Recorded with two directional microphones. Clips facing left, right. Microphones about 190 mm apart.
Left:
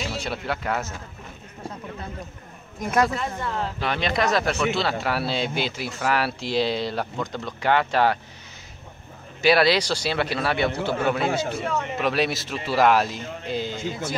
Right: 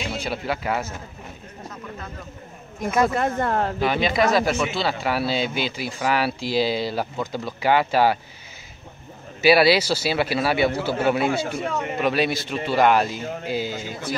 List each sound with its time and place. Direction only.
0.0 s speech: centre (ahead or behind)
3.1 s speech: 55° right (ahead or behind)
3.8 s speech: 5° right (ahead or behind)
9.4 s speech: 5° right (ahead or behind)